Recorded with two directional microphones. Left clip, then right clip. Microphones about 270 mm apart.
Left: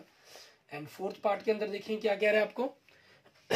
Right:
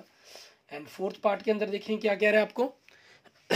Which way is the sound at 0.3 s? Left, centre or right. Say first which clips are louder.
Right 2 dB; right.